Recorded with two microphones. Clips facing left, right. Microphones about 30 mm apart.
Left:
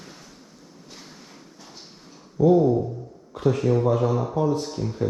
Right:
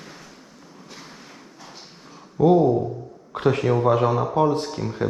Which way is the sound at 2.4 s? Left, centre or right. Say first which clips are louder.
Right 1 dB; right.